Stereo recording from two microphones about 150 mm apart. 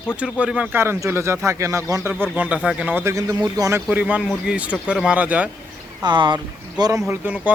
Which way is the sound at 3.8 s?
10° right (ahead or behind).